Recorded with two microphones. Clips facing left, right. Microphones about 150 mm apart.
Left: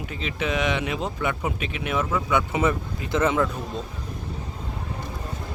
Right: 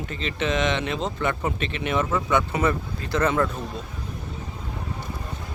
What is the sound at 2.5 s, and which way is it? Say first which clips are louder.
Speech: even; 15° left (ahead or behind).